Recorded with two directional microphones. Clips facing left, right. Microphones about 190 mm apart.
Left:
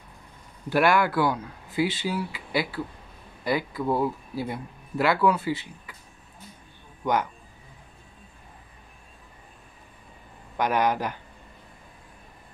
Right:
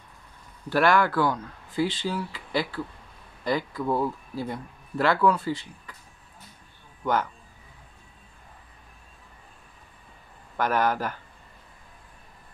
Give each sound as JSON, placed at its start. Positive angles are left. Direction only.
{"t": 0.7, "sound": "speech", "side_deg": 10}
{"t": 10.6, "sound": "speech", "side_deg": 15}